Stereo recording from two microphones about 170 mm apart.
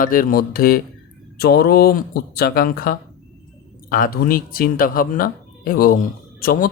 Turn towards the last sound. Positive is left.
turn(degrees=55)  # may be behind; listen again after turning